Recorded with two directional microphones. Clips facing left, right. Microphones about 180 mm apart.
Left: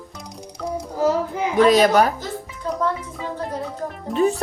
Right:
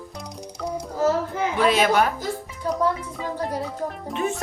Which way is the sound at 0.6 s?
Centre (ahead or behind).